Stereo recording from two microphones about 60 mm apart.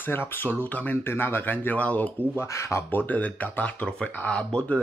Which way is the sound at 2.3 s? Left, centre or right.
Left.